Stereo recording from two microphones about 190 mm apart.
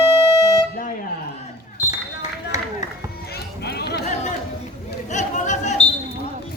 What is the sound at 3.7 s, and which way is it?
Chatter, 60° left (ahead or behind).